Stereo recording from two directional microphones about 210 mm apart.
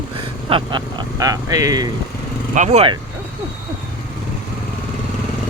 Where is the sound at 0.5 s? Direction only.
25° right (ahead or behind).